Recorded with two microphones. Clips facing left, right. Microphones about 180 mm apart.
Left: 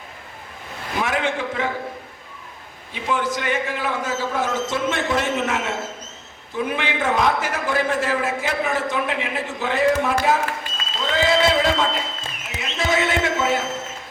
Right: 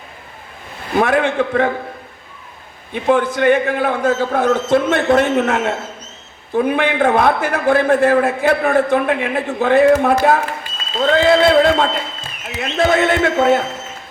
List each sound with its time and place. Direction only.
0.9 s a man's voice: 60° right (ahead or behind)
2.9 s a man's voice: 55° right (ahead or behind)